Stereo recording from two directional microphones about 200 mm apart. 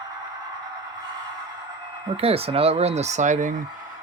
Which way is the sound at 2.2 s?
30° right (ahead or behind).